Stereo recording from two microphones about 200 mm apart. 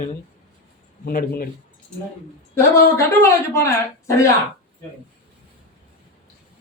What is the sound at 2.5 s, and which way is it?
Speech, 15° left (ahead or behind).